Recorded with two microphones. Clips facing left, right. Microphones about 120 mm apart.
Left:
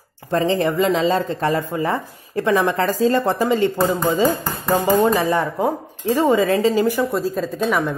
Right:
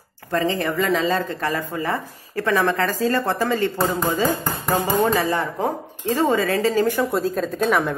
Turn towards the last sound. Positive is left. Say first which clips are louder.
# even
turn(degrees=0)  # may be behind; listen again after turning